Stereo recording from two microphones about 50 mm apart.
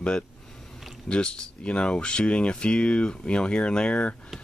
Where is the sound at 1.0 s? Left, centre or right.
Centre.